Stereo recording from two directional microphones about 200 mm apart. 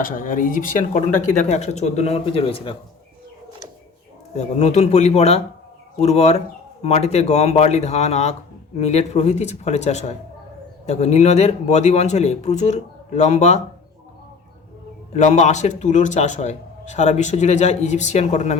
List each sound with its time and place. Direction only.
0.0 s a man's voice: 45° left (ahead or behind); by 2.7 s 25° left (ahead or behind)
4.4 s a man's voice: 35° left (ahead or behind)
15.1 s a man's voice: 35° left (ahead or behind)